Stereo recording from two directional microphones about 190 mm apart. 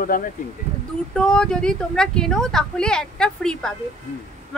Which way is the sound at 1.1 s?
5° left (ahead or behind).